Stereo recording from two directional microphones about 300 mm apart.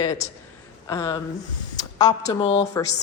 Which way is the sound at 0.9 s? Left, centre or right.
Centre.